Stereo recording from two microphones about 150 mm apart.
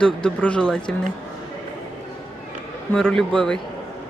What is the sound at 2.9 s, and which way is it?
Speech, 5° left (ahead or behind).